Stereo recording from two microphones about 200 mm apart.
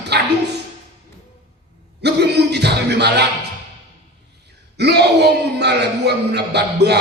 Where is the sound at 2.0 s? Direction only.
55° right (ahead or behind).